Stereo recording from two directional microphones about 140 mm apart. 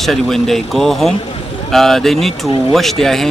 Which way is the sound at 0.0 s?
Centre (ahead or behind).